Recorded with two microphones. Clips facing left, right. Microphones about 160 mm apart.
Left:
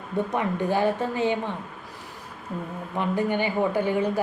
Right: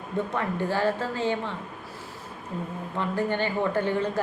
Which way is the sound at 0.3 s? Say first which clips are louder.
Left 3 dB; 15° left (ahead or behind).